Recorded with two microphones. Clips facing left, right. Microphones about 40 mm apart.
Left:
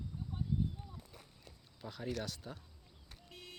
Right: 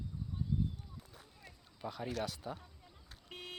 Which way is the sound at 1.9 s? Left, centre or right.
Centre.